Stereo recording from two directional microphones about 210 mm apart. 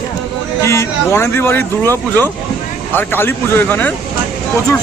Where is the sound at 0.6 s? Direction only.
15° left (ahead or behind).